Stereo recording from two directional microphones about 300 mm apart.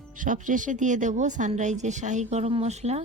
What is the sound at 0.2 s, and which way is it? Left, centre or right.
A woman's voice, right.